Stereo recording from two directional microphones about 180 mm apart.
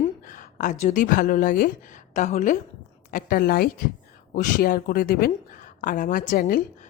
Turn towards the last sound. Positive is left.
turn(degrees=50)  # may be behind; listen again after turning